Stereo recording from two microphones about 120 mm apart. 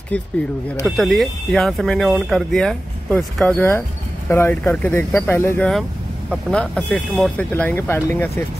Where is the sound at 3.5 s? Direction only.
20° left (ahead or behind).